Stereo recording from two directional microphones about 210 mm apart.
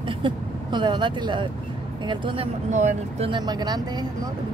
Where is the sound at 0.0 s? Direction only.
25° right (ahead or behind).